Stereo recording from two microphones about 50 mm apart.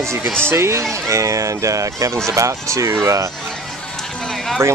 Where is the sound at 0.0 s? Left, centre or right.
Right.